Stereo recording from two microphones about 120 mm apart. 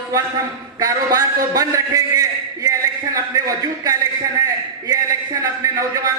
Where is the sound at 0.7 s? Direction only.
30° right (ahead or behind).